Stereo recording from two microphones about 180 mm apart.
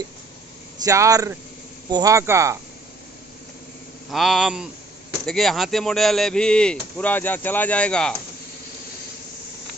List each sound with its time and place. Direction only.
0.8 s speech: 20° right (ahead or behind)
4.1 s speech: centre (ahead or behind)